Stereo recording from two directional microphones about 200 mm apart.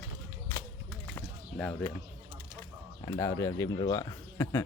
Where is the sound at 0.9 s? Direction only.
5° left (ahead or behind).